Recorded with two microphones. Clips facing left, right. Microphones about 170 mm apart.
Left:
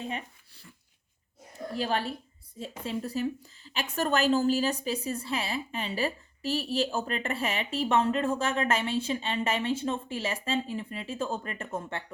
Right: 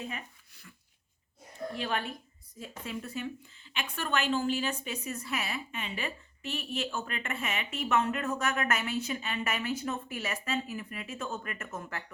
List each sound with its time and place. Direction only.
0.0 s speech: 30° left (ahead or behind)
1.7 s a woman's voice: 35° left (ahead or behind)